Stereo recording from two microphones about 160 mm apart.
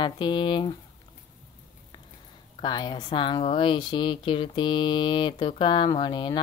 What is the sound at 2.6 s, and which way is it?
Speech, 25° left (ahead or behind).